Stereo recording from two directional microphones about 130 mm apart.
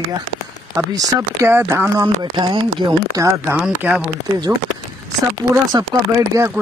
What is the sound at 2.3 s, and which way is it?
Speech, 40° right (ahead or behind).